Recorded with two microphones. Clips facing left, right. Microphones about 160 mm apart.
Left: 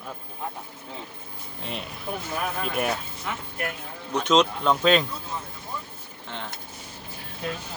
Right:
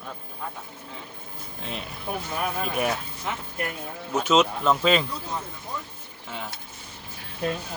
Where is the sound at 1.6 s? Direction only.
Centre (ahead or behind).